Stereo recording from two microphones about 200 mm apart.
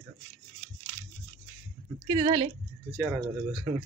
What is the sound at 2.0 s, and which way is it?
Speech, 25° right (ahead or behind).